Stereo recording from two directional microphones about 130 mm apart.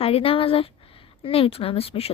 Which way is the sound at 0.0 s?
45° left (ahead or behind).